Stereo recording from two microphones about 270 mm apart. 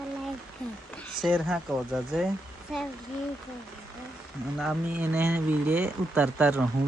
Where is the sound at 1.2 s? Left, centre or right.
Centre.